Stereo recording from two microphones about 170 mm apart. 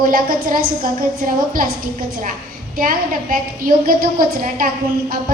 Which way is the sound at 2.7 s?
55° right (ahead or behind).